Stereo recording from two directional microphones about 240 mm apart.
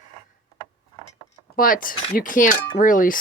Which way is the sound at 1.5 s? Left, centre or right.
Left.